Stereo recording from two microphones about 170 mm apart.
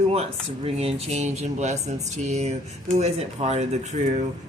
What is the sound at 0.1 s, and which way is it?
Speech, 35° right (ahead or behind).